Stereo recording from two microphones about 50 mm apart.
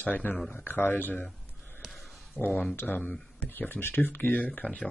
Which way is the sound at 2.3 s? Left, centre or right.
Left.